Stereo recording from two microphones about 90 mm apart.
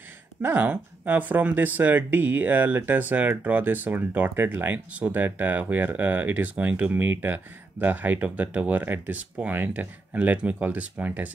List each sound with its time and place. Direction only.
0.4 s speech: 20° right (ahead or behind)